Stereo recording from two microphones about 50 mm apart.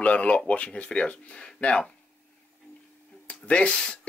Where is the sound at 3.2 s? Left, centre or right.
Left.